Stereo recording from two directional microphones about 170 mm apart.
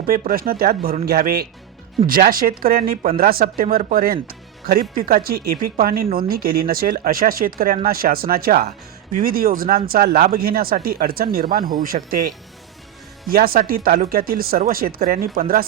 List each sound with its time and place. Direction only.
0.1 s speech: 60° right (ahead or behind)
13.2 s speech: 60° right (ahead or behind)